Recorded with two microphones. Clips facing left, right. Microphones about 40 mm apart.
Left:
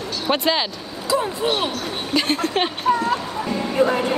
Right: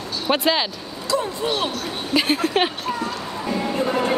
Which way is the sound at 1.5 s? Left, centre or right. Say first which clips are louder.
Left 1 dB; left.